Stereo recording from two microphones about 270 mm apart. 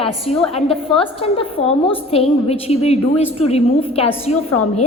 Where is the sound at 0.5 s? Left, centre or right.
Centre.